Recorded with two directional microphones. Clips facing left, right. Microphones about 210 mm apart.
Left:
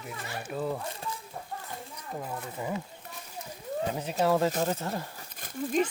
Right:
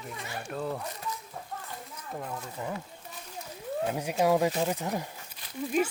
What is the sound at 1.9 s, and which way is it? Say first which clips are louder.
Speech: even; 5° left (ahead or behind).